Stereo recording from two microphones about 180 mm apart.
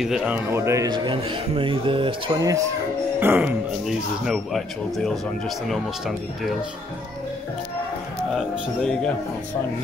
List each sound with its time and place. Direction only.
0.0 s a man's voice: 5° right (ahead or behind); by 2.6 s 20° right (ahead or behind)
3.2 s a man's voice: 10° right (ahead or behind)
8.4 s a man's voice: 5° left (ahead or behind)